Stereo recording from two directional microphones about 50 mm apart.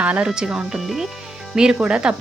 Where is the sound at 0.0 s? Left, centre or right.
Right.